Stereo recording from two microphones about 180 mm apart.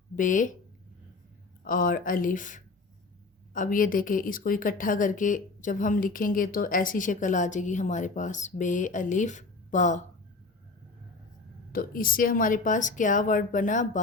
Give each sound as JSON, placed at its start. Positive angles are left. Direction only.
{"t": 0.2, "sound": "speech", "side_deg": 45}
{"t": 1.6, "sound": "speech", "side_deg": 50}
{"t": 11.7, "sound": "speech", "side_deg": 50}